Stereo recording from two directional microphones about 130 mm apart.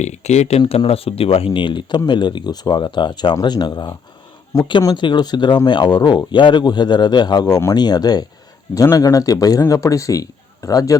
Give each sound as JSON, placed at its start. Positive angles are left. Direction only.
{"t": 0.0, "sound": "speech", "side_deg": 60}